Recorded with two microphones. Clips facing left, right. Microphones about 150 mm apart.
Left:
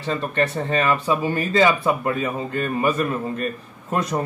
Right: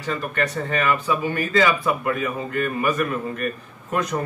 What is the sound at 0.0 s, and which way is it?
Speech, 25° left (ahead or behind).